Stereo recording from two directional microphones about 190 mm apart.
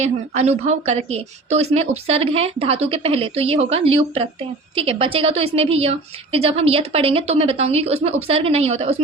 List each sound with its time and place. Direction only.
0.0 s a woman's voice: 35° right (ahead or behind)